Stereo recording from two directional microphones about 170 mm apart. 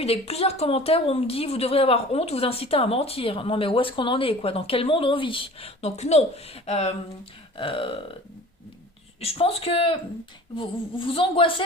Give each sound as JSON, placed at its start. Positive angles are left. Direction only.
{"t": 0.0, "sound": "a woman's voice", "side_deg": 35}
{"t": 9.2, "sound": "a woman's voice", "side_deg": 35}